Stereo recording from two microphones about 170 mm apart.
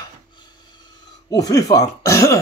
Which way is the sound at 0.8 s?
25° left (ahead or behind).